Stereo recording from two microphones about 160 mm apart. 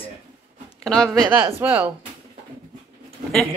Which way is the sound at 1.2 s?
10° right (ahead or behind).